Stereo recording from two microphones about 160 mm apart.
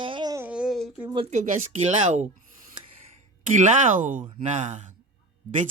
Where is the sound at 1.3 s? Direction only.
50° right (ahead or behind).